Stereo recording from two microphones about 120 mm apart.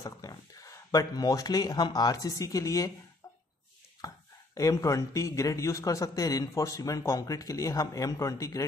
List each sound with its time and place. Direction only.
0.0 s speech: 30° left (ahead or behind)
4.0 s a sound: 30° left (ahead or behind)
4.6 s a man's voice: 25° left (ahead or behind)